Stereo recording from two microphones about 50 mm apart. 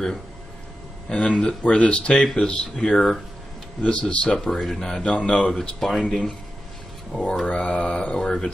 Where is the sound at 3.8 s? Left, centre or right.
Left.